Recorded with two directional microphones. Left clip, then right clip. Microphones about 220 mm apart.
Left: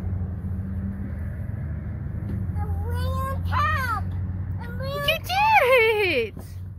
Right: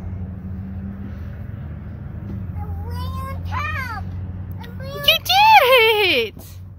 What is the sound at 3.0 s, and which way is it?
Child singing, centre (ahead or behind).